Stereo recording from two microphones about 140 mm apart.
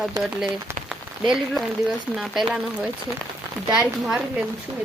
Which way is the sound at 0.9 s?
5° right (ahead or behind).